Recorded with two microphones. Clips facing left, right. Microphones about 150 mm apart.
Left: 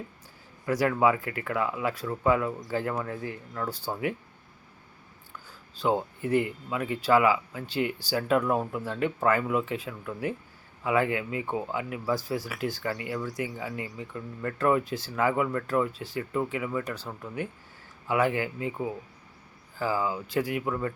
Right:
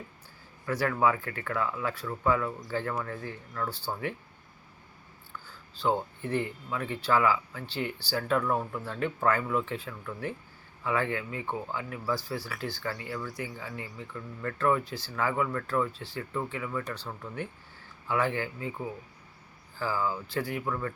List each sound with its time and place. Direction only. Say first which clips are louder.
0.6 s speech: left 3 dB; 15° left (ahead or behind)
5.8 s speech: left 2 dB; 15° left (ahead or behind)
19.8 s speech: left 2 dB; 15° left (ahead or behind)